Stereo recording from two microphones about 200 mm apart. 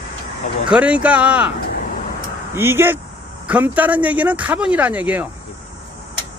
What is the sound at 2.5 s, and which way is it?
Speech, 10° right (ahead or behind).